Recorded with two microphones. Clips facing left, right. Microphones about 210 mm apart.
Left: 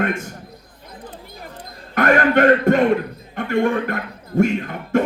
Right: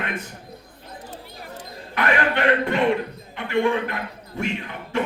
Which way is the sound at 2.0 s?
45° left (ahead or behind).